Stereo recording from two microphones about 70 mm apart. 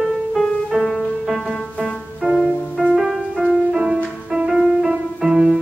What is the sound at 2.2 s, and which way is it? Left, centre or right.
Music, right.